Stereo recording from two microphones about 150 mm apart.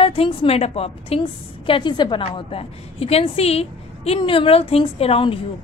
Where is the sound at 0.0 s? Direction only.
35° left (ahead or behind).